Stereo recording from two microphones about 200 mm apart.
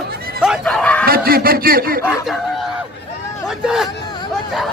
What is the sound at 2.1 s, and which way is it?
Speech, centre (ahead or behind).